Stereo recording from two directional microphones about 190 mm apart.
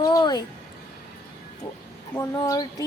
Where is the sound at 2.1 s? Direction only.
15° left (ahead or behind).